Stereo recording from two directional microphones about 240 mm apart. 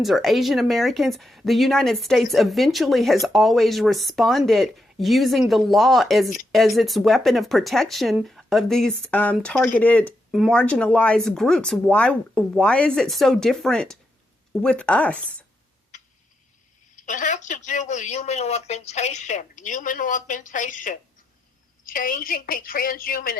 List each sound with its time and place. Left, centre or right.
0.0 s speech: centre
17.1 s speech: left